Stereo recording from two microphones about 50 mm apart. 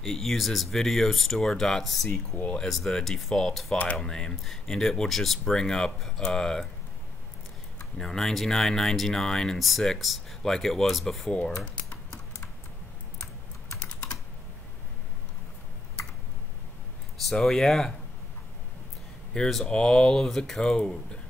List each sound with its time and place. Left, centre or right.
0.0 s speech: centre
3.7 s speech: left
4.0 s speech: centre
8.0 s speech: centre
9.6 s speech: centre
11.3 s speech: centre
17.3 s speech: centre
19.6 s speech: centre